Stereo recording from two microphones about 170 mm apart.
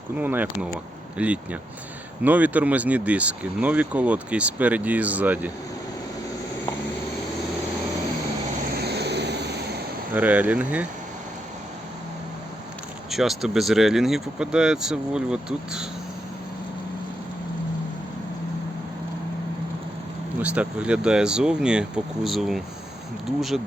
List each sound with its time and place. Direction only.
0.2 s speech: 10° right (ahead or behind)
8.8 s vehicle: 75° right (ahead or behind)
10.2 s speech: 10° right (ahead or behind)
13.1 s speech: centre (ahead or behind)
20.4 s speech: 10° right (ahead or behind)